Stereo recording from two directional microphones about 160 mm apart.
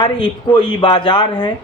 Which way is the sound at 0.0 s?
30° left (ahead or behind).